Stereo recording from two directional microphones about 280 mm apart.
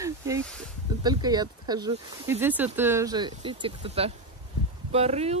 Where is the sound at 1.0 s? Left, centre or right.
Centre.